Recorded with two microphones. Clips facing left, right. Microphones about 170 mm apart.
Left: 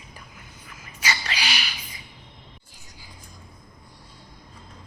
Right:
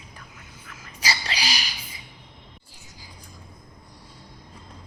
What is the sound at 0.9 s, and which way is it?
Rodents, 35° right (ahead or behind).